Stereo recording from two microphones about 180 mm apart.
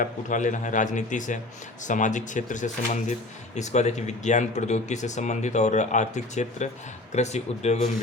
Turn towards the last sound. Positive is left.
turn(degrees=40)  # may be behind; listen again after turning